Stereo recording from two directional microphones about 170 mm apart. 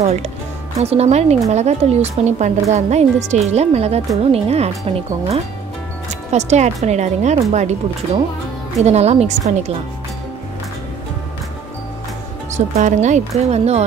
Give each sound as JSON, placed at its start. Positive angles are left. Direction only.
{"t": 0.0, "sound": "speech", "side_deg": -40}
{"t": 12.5, "sound": "speech", "side_deg": -45}